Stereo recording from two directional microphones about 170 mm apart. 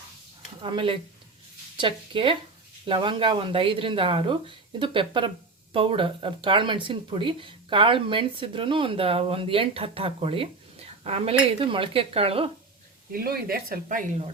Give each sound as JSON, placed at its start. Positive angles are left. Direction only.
{"t": 0.6, "sound": "speech", "side_deg": -30}
{"t": 13.1, "sound": "speech", "side_deg": -60}